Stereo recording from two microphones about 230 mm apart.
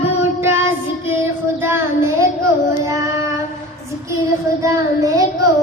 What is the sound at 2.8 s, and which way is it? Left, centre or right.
Child singing, centre.